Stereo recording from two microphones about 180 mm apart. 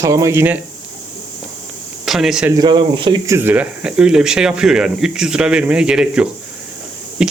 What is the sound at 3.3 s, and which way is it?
Speech, 10° right (ahead or behind).